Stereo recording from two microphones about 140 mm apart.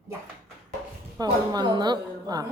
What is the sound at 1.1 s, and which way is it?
A woman's voice, 30° right (ahead or behind).